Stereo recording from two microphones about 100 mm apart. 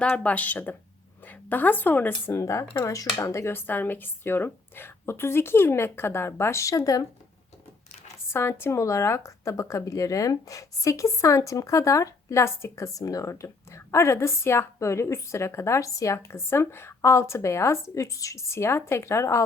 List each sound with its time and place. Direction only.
0.0 s a woman's voice: 10° left (ahead or behind); by 7.0 s 35° left (ahead or behind)
8.3 s speech: 25° left (ahead or behind)